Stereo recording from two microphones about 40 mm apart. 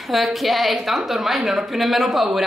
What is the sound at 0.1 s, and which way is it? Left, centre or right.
A man's voice, centre.